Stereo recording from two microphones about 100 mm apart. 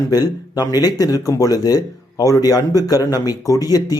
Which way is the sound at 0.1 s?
40° left (ahead or behind).